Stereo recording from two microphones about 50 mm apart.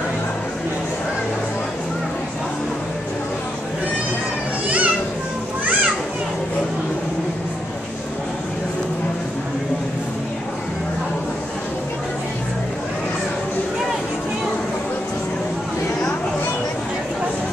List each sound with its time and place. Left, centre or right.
4.6 s children playing: right